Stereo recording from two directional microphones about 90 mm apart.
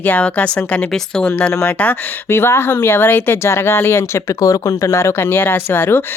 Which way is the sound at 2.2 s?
25° left (ahead or behind).